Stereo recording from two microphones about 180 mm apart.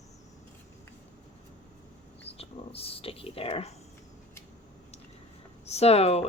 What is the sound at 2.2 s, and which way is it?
A woman's voice, 35° left (ahead or behind).